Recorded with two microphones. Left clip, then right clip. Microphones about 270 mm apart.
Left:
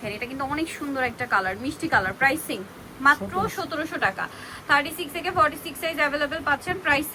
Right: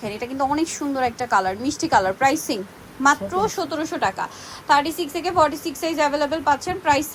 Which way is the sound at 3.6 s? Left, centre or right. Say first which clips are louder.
Right 3 dB; centre.